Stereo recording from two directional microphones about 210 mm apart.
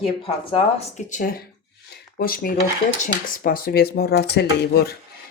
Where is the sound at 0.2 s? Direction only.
30° left (ahead or behind).